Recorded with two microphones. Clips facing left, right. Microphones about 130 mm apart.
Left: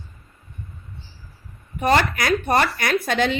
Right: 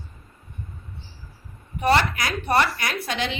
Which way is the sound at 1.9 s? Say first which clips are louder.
Left 2 dB; 50° left (ahead or behind).